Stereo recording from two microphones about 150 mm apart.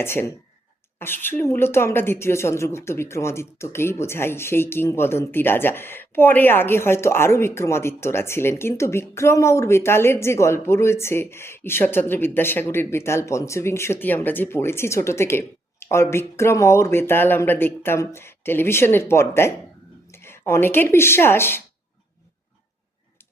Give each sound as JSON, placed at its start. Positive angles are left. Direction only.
{"t": 0.0, "sound": "a woman's voice", "side_deg": 15}